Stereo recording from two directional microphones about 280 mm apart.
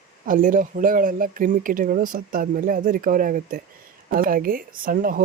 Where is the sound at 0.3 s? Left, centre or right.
Right.